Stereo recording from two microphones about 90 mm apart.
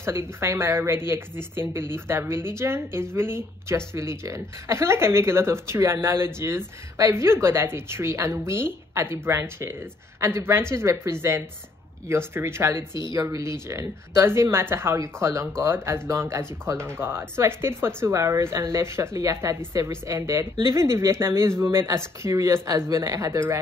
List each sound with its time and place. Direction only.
0.0 s speech: 30° right (ahead or behind)